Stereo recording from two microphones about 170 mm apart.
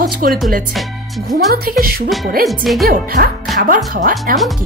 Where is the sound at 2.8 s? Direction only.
65° right (ahead or behind).